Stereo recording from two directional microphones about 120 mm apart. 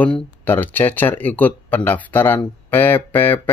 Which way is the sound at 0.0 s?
15° left (ahead or behind).